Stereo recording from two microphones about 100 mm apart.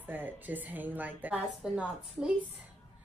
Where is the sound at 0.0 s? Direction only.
20° right (ahead or behind).